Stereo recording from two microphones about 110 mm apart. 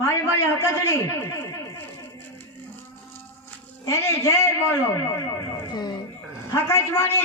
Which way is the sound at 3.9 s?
25° left (ahead or behind).